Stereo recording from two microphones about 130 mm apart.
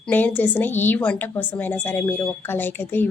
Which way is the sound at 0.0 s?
10° left (ahead or behind).